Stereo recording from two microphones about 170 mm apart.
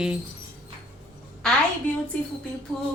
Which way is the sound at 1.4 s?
5° left (ahead or behind).